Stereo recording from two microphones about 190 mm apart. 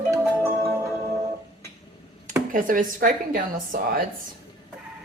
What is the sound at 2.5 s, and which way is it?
A woman's voice, 45° right (ahead or behind).